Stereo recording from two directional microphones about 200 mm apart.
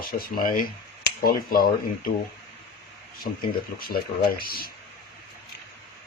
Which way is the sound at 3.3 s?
40° left (ahead or behind).